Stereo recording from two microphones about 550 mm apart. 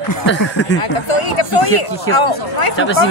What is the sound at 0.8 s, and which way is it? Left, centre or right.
Speech, left.